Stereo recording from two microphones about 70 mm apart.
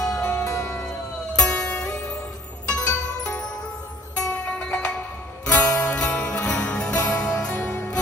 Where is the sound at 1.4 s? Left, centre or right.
Centre.